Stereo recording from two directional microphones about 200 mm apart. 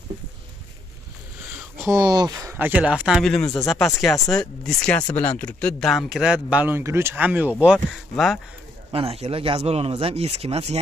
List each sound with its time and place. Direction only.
1.6 s speech: 10° right (ahead or behind)
8.9 s speech: 30° right (ahead or behind)